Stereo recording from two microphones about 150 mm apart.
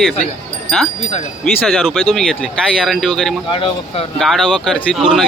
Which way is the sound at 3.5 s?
35° left (ahead or behind).